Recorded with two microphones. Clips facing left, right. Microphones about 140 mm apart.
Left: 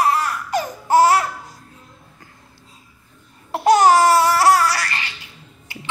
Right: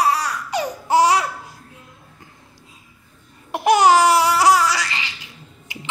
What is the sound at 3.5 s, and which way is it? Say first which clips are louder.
Babbling: left 1 dB; 15° right (ahead or behind).